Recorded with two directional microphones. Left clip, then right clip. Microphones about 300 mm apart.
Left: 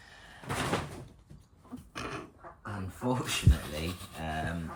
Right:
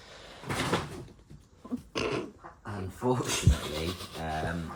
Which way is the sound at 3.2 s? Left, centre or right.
Centre.